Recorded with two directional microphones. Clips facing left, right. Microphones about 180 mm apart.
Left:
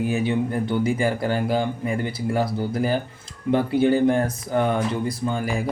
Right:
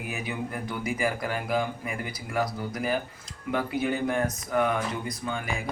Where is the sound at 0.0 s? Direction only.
30° left (ahead or behind).